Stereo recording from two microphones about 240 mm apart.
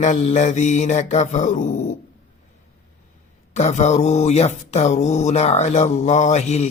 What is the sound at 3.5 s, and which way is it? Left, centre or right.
Mantra, left.